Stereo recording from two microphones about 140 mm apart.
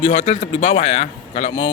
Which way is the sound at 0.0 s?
50° left (ahead or behind).